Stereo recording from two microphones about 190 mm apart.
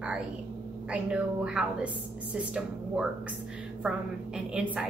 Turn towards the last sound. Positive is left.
turn(degrees=-5)  # may be behind; listen again after turning